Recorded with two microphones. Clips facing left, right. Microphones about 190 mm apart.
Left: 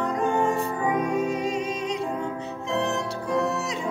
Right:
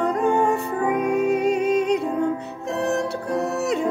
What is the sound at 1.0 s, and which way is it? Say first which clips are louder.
Music: right 5 dB; 60° right (ahead or behind).